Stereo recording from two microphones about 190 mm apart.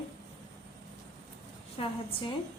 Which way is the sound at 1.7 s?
30° left (ahead or behind).